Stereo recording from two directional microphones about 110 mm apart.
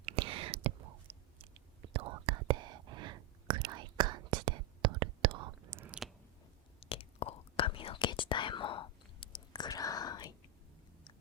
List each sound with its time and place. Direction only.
0.0 s whispering: 55° right (ahead or behind)
5.7 s chewing: 30° right (ahead or behind)
6.7 s whispering: 60° left (ahead or behind); by 10.3 s 35° left (ahead or behind)